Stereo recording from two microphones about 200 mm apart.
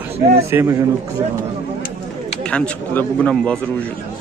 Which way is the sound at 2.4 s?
5° left (ahead or behind).